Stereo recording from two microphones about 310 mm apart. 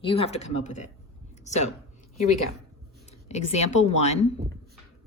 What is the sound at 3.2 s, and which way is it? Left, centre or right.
Speech, left.